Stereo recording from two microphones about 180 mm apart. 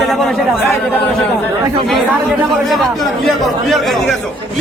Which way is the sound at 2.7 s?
Centre (ahead or behind).